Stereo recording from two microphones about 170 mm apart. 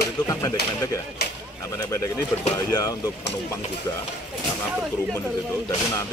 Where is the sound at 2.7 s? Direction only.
20° left (ahead or behind).